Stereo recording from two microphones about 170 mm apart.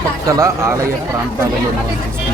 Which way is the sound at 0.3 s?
15° right (ahead or behind).